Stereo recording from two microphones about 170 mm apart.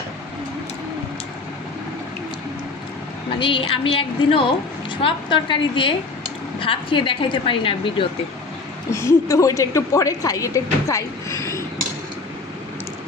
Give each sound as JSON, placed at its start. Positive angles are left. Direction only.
{"t": 3.3, "sound": "a woman's voice", "side_deg": 30}
{"t": 8.9, "sound": "a woman's voice", "side_deg": 15}